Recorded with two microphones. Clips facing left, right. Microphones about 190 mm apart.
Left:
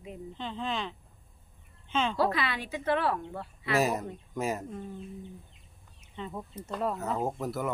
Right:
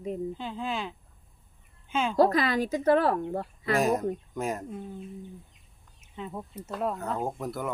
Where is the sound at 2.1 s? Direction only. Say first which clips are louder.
Right 6 dB; 40° right (ahead or behind).